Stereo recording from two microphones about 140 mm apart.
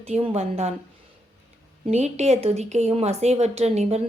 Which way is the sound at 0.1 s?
50° right (ahead or behind).